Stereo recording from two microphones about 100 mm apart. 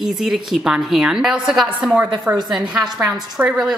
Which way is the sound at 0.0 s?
5° right (ahead or behind).